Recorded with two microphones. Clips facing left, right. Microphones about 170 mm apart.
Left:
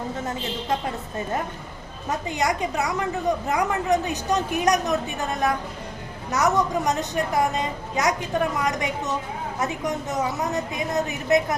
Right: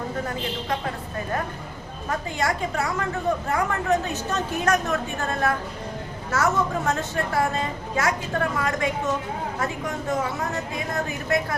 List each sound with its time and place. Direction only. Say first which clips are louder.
2.0 s a woman's voice: left 1 dB; 20° left (ahead or behind)